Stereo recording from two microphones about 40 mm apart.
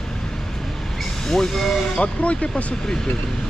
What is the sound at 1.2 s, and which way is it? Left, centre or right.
Speech, centre.